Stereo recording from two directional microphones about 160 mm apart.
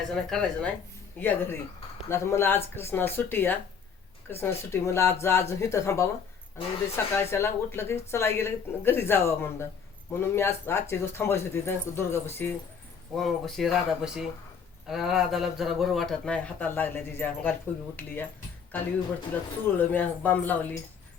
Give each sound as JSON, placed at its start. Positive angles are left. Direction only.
{"t": 0.1, "sound": "a woman's voice", "side_deg": 5}
{"t": 13.1, "sound": "a woman's voice", "side_deg": 0}
{"t": 19.3, "sound": "a woman's voice", "side_deg": 10}